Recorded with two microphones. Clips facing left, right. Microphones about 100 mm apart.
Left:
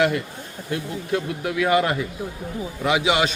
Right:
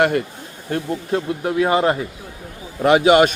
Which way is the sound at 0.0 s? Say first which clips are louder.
Right 3 dB; 50° right (ahead or behind).